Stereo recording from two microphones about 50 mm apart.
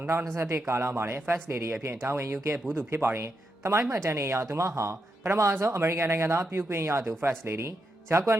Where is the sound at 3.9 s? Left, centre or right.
Right.